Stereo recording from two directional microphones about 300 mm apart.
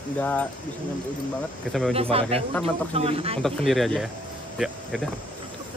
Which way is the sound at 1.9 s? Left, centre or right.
Centre.